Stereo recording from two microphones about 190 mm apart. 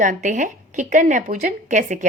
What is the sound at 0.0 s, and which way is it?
A woman's voice, 40° right (ahead or behind).